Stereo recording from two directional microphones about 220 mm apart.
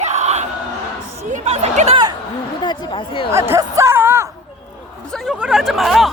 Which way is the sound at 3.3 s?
10° right (ahead or behind).